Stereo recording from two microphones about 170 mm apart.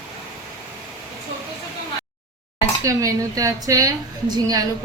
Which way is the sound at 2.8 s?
20° right (ahead or behind).